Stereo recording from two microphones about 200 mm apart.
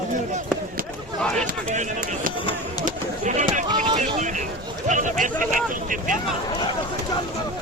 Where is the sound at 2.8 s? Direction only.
40° right (ahead or behind).